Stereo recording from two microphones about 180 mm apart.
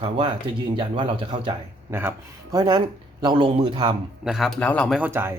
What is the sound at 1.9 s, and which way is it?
Speech, 15° right (ahead or behind).